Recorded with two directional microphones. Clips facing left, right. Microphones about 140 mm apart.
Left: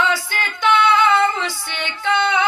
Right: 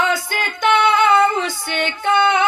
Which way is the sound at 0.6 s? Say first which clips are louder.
Right 1 dB; 50° right (ahead or behind).